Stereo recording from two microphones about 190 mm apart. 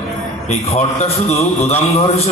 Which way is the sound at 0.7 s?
35° left (ahead or behind).